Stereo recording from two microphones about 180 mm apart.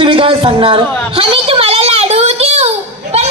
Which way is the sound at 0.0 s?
30° right (ahead or behind).